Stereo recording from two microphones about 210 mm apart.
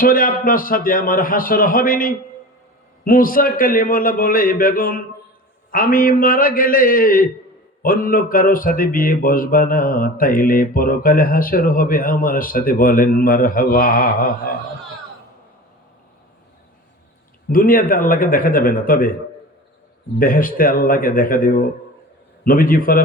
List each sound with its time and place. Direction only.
0.0 s speech: 40° left (ahead or behind)
17.5 s speech: 40° left (ahead or behind)
20.1 s a man's voice: 40° left (ahead or behind)